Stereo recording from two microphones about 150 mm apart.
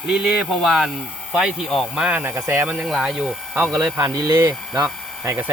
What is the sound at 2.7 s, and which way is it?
Speech, 5° right (ahead or behind).